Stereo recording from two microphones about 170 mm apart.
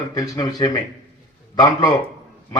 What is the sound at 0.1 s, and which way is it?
A man's voice, 20° left (ahead or behind).